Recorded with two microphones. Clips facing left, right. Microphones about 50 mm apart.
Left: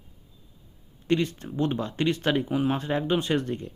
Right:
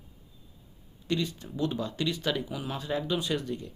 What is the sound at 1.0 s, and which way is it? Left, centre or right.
Speech, left.